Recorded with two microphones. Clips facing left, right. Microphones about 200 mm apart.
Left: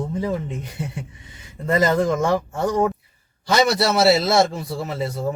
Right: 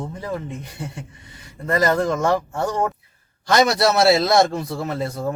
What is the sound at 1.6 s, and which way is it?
Speech, 20° left (ahead or behind).